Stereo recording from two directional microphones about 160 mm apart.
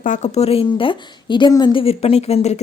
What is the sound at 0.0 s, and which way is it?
A woman's voice, 50° left (ahead or behind).